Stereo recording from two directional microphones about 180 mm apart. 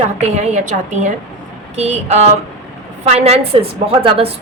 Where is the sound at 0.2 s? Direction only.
40° right (ahead or behind).